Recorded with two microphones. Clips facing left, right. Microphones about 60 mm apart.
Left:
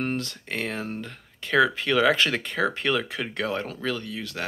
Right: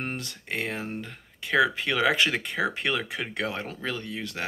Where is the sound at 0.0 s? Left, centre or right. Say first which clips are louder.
Left 5 dB; centre.